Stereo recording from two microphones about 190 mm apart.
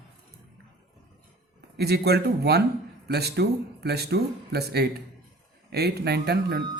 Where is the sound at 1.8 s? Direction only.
60° right (ahead or behind).